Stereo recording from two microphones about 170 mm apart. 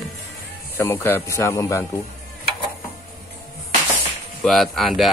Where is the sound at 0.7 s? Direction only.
15° left (ahead or behind).